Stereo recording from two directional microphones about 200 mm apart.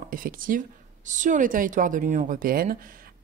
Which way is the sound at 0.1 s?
45° right (ahead or behind).